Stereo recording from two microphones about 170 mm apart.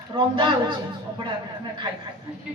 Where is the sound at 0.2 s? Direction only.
25° right (ahead or behind).